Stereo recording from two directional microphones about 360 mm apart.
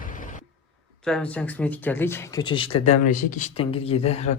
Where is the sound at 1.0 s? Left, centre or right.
Centre.